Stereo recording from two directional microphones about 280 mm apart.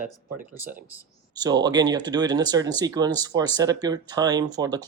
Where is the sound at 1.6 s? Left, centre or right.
Centre.